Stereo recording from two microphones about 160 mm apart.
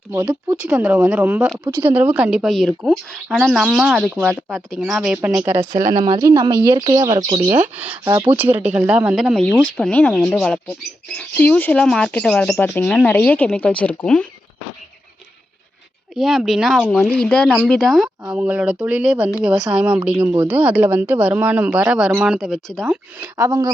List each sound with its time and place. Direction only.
0.1 s speech: 20° right (ahead or behind)
1.5 s speech: 25° right (ahead or behind)
1.9 s speech: 10° right (ahead or behind); by 7.3 s 25° right (ahead or behind)
7.5 s speech: 10° right (ahead or behind); by 14.3 s 10° left (ahead or behind)
16.1 s speech: centre (ahead or behind)
16.9 s speech: 10° left (ahead or behind)
22.8 s speech: 10° right (ahead or behind)
23.4 s speech: 25° right (ahead or behind)